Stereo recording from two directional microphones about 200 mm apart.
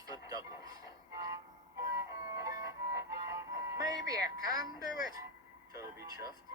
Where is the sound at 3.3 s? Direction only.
20° right (ahead or behind).